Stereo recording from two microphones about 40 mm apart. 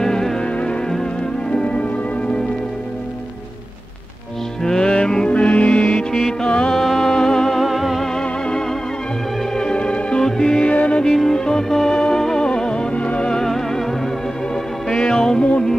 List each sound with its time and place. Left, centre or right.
0.0 s music: centre
0.4 s music: left
4.6 s music: centre
5.3 s music: left
6.7 s music: centre
8.1 s music: centre
9.6 s organ: left
10.2 s music: centre
10.7 s music: left
11.3 s music: centre
13.3 s music: centre